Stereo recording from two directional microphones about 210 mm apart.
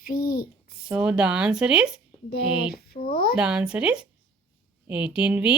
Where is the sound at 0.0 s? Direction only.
45° left (ahead or behind).